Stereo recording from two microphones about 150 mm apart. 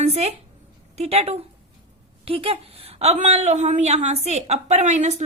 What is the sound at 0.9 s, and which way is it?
A woman's voice, 45° right (ahead or behind).